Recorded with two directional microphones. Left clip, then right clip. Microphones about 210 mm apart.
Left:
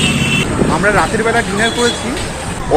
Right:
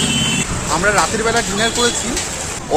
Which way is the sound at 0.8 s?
10° right (ahead or behind).